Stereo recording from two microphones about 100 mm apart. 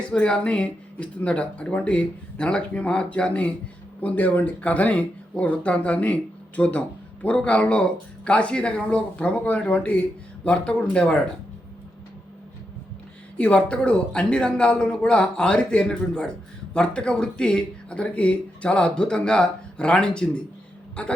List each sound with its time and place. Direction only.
0.1 s speech: 10° left (ahead or behind)
13.3 s speech: 10° left (ahead or behind)